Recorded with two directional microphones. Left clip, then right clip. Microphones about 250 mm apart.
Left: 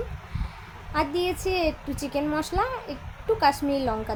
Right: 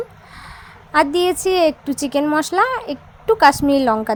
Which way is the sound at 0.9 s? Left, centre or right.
Right.